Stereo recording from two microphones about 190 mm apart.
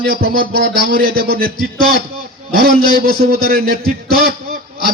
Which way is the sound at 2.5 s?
50° right (ahead or behind).